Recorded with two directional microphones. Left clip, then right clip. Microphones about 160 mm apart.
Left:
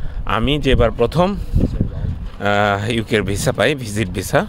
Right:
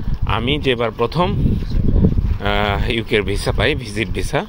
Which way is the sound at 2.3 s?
40° left (ahead or behind).